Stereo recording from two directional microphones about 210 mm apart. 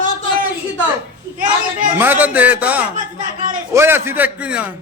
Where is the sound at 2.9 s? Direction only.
40° right (ahead or behind).